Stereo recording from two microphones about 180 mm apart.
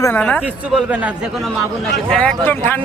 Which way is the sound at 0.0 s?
10° left (ahead or behind).